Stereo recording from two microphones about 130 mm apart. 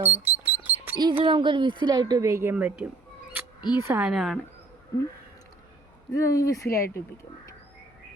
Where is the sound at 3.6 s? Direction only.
35° left (ahead or behind).